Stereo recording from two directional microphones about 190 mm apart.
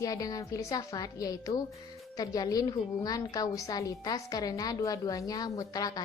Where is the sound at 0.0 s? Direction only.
20° left (ahead or behind).